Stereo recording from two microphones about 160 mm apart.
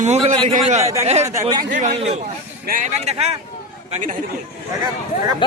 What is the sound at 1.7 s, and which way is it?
Speech, 50° right (ahead or behind).